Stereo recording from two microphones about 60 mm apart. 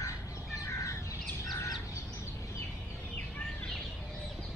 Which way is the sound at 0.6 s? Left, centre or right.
Left.